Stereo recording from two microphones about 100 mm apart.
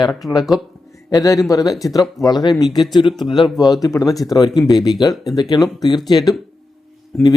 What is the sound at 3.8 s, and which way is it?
Speech, 35° left (ahead or behind).